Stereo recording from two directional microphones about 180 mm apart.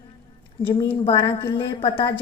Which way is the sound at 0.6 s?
25° left (ahead or behind).